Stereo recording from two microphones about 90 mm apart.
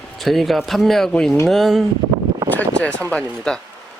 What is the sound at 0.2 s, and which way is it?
Speech, centre (ahead or behind).